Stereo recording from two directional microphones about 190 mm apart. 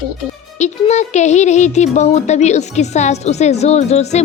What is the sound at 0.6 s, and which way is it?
Speech, 40° left (ahead or behind).